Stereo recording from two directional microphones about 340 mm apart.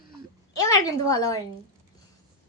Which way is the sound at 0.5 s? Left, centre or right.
Centre.